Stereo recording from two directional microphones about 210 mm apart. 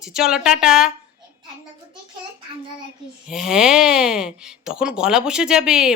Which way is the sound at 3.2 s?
5° right (ahead or behind).